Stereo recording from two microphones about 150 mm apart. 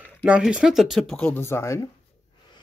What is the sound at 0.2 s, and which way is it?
Speech, 5° right (ahead or behind).